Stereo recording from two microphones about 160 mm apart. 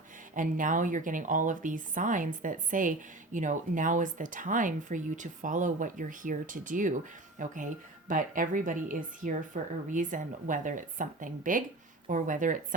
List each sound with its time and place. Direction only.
0.3 s a woman's voice: 55° right (ahead or behind)